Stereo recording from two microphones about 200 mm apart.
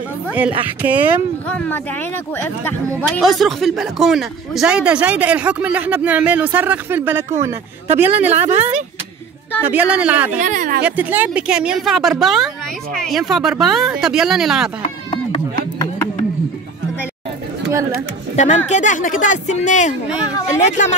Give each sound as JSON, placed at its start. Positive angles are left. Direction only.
{"t": 0.3, "sound": "speech", "side_deg": -10}
{"t": 3.0, "sound": "speech", "side_deg": 0}
{"t": 9.6, "sound": "speech", "side_deg": -10}
{"t": 10.4, "sound": "speech", "side_deg": -40}
{"t": 10.8, "sound": "speech", "side_deg": -10}
{"t": 15.0, "sound": "chop", "side_deg": 20}
{"t": 18.3, "sound": "speech", "side_deg": 35}